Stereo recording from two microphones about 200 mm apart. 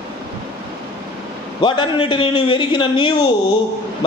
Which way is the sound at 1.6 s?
25° left (ahead or behind).